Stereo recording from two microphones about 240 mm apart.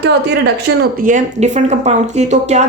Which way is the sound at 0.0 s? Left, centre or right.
Right.